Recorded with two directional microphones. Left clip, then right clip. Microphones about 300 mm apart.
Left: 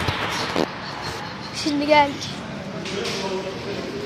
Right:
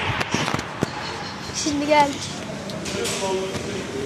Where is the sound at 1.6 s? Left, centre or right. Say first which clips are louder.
Left 1 dB; centre.